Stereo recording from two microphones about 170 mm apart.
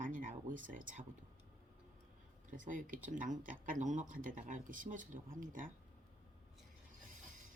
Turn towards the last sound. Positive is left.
turn(degrees=-50)  # may be behind; listen again after turning